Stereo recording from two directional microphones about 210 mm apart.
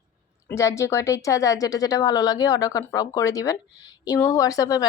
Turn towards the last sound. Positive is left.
turn(degrees=15)  # may be behind; listen again after turning